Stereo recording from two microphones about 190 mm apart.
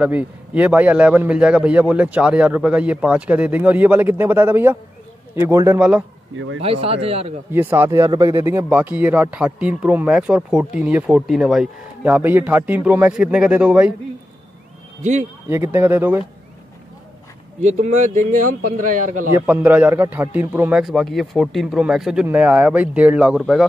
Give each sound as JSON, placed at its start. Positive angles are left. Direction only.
{"t": 0.0, "sound": "a man's voice", "side_deg": -10}
{"t": 5.8, "sound": "speech", "side_deg": -5}
{"t": 6.3, "sound": "speech", "side_deg": -90}
{"t": 6.6, "sound": "speech", "side_deg": -30}
{"t": 7.5, "sound": "a man's voice", "side_deg": -10}
{"t": 15.0, "sound": "a man's voice", "side_deg": -35}
{"t": 15.4, "sound": "a man's voice", "side_deg": -15}
{"t": 17.6, "sound": "speech", "side_deg": -35}
{"t": 19.3, "sound": "a man's voice", "side_deg": -10}